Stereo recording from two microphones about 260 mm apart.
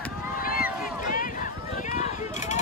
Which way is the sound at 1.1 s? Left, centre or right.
Left.